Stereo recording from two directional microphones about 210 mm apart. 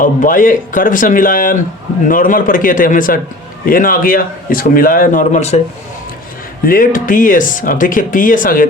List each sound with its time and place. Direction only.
0.0 s speech: 40° left (ahead or behind)
6.7 s speech: 40° left (ahead or behind)